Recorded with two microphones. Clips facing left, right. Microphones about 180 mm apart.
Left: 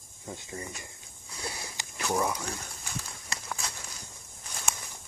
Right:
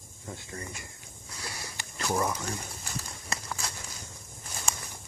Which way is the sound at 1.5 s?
15° left (ahead or behind).